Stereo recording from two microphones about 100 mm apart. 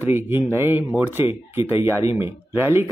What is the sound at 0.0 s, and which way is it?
A man's voice, 20° right (ahead or behind).